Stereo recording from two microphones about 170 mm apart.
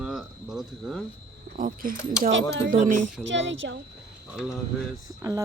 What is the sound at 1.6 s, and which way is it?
Speech, 50° right (ahead or behind).